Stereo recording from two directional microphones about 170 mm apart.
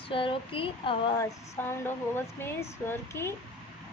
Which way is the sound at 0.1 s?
30° left (ahead or behind).